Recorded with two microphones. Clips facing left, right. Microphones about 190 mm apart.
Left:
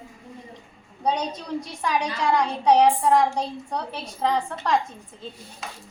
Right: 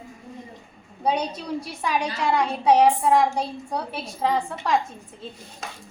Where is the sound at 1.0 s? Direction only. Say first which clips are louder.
Right 1 dB; 10° right (ahead or behind).